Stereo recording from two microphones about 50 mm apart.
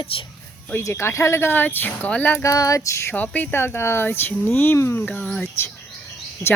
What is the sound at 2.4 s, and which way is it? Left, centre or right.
Female singing, left.